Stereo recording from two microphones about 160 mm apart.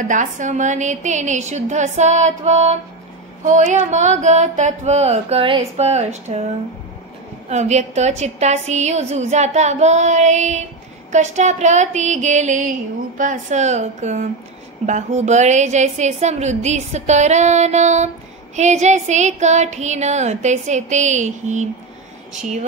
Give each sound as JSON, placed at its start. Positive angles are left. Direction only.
{"t": 0.1, "sound": "a woman's voice", "side_deg": -50}